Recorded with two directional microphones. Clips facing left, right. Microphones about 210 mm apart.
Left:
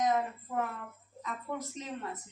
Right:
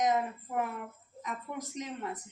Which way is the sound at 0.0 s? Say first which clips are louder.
Right 1 dB; 20° right (ahead or behind).